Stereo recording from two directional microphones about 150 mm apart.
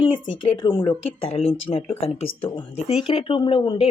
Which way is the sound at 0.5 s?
30° left (ahead or behind).